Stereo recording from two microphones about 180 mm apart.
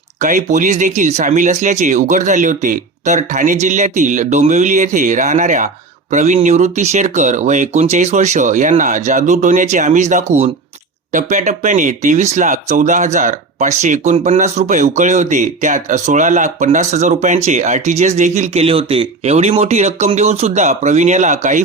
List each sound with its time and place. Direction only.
0.2 s speech: 45° right (ahead or behind)